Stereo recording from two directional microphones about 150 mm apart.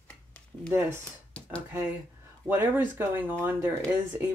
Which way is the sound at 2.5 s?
15° right (ahead or behind).